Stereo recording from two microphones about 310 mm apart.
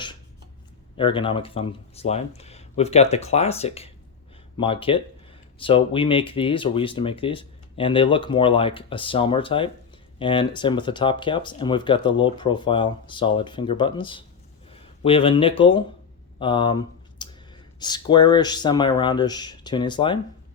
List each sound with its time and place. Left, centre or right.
0.9 s speech: centre